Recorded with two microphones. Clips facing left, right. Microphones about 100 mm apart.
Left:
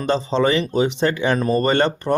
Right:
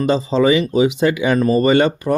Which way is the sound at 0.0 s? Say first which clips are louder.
Right 3 dB; 5° right (ahead or behind).